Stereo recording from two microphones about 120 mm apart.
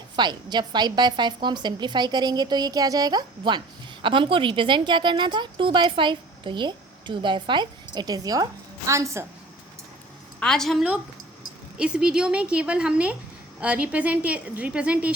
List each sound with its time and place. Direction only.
0.2 s a woman's voice: 40° right (ahead or behind)
10.4 s a woman's voice: 5° left (ahead or behind)
11.8 s a woman's voice: 10° right (ahead or behind)